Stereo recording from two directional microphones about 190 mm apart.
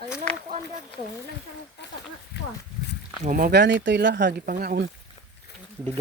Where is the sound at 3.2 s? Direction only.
50° right (ahead or behind).